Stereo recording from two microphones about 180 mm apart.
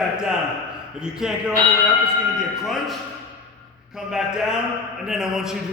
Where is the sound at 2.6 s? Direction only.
Centre (ahead or behind).